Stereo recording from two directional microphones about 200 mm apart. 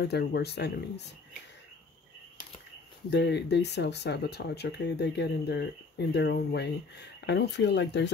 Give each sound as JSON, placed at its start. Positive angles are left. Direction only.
{"t": 0.0, "sound": "speech", "side_deg": 55}
{"t": 3.1, "sound": "speech", "side_deg": 60}